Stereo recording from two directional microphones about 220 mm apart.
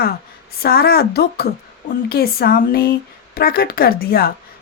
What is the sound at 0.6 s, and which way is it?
A woman's voice, 45° left (ahead or behind).